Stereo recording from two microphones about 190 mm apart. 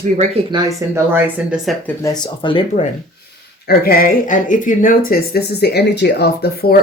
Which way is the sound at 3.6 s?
50° left (ahead or behind).